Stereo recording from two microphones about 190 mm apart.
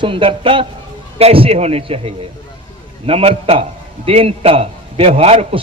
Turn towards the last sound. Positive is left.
turn(degrees=-30)  # may be behind; listen again after turning